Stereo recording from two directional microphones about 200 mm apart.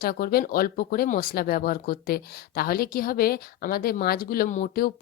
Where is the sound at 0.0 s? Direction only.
45° left (ahead or behind).